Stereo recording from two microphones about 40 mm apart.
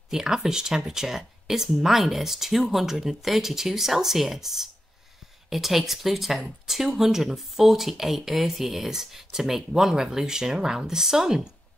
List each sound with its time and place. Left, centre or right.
0.1 s speech: centre